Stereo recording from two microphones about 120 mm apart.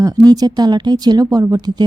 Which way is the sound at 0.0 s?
30° right (ahead or behind).